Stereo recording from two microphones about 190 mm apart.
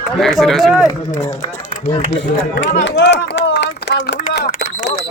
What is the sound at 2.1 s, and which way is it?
Speech, 65° left (ahead or behind).